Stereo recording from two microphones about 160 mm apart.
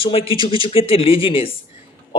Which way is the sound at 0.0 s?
35° left (ahead or behind).